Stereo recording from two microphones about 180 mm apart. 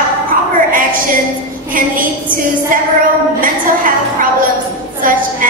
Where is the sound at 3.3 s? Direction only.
50° right (ahead or behind).